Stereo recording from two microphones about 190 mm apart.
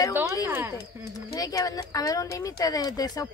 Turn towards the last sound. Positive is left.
turn(degrees=20)  # may be behind; listen again after turning